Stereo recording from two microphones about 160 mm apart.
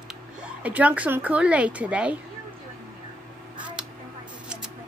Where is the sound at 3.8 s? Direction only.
5° right (ahead or behind).